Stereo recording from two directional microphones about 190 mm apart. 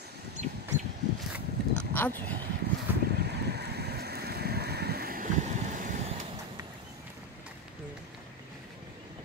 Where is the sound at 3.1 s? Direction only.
60° right (ahead or behind); by 6.2 s 40° right (ahead or behind).